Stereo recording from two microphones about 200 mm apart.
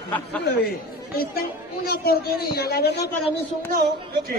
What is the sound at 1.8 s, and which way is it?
A man's voice, 50° left (ahead or behind).